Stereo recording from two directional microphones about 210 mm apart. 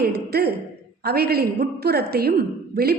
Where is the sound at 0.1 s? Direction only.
50° right (ahead or behind).